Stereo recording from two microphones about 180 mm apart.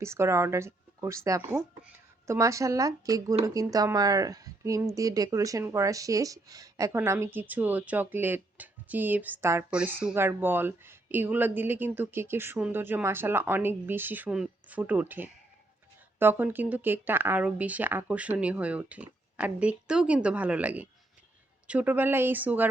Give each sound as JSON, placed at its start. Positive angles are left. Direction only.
{"t": 0.0, "sound": "speech", "side_deg": -15}